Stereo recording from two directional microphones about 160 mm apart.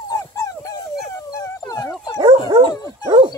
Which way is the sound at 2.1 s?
25° right (ahead or behind).